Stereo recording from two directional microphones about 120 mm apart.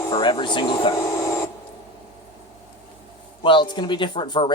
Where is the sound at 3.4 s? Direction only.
40° left (ahead or behind).